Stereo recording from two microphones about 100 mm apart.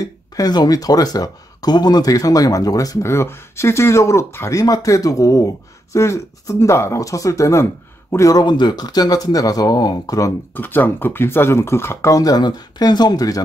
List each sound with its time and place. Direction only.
0.0 s speech: 40° left (ahead or behind)
10.5 s speech: 20° left (ahead or behind); by 13.4 s 40° left (ahead or behind)